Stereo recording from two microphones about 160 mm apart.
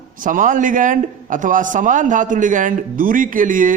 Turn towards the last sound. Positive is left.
turn(degrees=-55)  # may be behind; listen again after turning